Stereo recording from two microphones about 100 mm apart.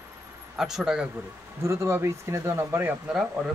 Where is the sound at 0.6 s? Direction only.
5° right (ahead or behind).